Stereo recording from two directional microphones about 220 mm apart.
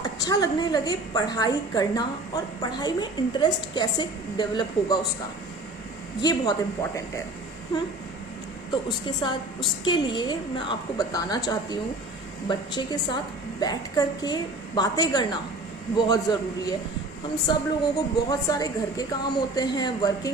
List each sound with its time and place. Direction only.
0.2 s a woman's voice: 15° left (ahead or behind)
6.2 s a woman's voice: 15° left (ahead or behind)
9.2 s a woman's voice: 20° left (ahead or behind)